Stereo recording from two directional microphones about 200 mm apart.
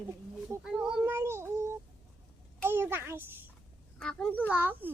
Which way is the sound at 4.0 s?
5° left (ahead or behind).